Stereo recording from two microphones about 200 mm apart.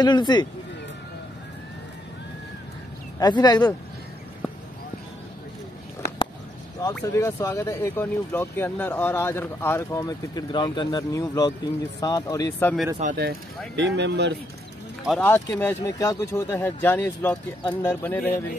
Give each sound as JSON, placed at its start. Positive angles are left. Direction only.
{"t": 0.0, "sound": "speech", "side_deg": 20}
{"t": 3.2, "sound": "speech", "side_deg": 20}
{"t": 6.8, "sound": "speech", "side_deg": 15}
{"t": 13.1, "sound": "speech", "side_deg": -55}
{"t": 15.0, "sound": "speech", "side_deg": 5}